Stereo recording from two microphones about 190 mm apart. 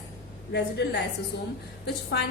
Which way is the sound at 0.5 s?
65° left (ahead or behind).